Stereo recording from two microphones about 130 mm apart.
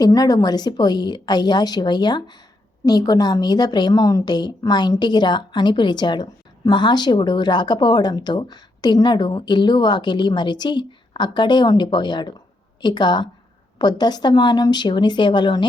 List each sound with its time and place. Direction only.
0.0 s speech: 30° left (ahead or behind)